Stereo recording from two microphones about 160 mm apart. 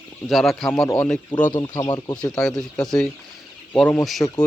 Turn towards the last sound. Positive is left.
turn(degrees=20)  # may be behind; listen again after turning